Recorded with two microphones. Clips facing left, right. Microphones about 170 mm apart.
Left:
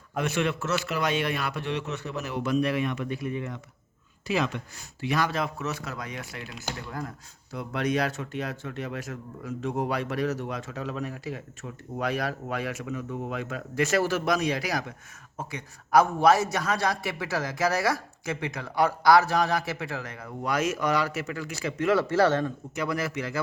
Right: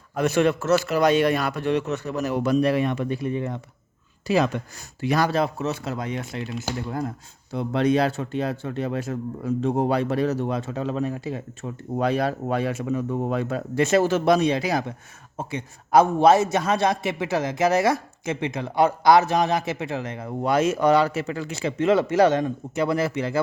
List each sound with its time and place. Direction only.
0.2 s a man's voice: 40° right (ahead or behind); by 22.5 s 15° right (ahead or behind)
22.7 s a man's voice: 30° right (ahead or behind)